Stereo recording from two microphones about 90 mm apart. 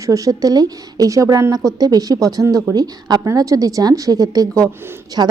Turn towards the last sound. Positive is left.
turn(degrees=-25)  # may be behind; listen again after turning